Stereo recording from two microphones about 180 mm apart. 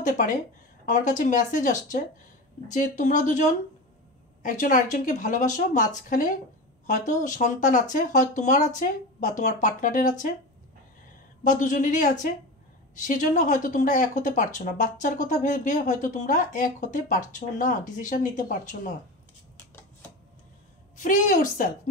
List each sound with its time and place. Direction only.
0.0 s speech: 45° left (ahead or behind)
11.4 s speech: 45° left (ahead or behind)
20.9 s speech: 45° left (ahead or behind)